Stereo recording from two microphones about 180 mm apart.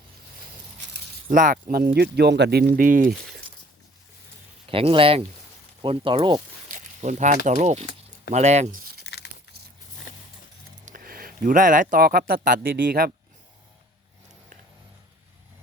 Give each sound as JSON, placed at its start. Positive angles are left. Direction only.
{"t": 1.3, "sound": "speech", "side_deg": -50}
{"t": 2.0, "sound": "speech", "side_deg": -65}
{"t": 4.7, "sound": "speech", "side_deg": -30}
{"t": 6.7, "sound": "speech", "side_deg": -40}
{"t": 9.0, "sound": "a sound", "side_deg": 70}
{"t": 10.8, "sound": "speech", "side_deg": -50}